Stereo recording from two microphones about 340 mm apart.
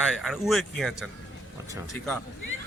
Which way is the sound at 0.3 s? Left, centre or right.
Centre.